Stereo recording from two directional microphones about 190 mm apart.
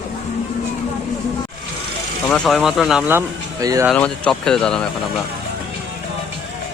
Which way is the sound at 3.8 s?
5° left (ahead or behind).